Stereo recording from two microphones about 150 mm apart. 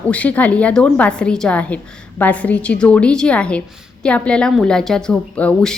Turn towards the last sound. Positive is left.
turn(degrees=5)  # may be behind; listen again after turning